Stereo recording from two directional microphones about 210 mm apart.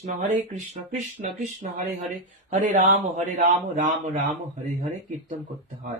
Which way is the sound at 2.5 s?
40° right (ahead or behind).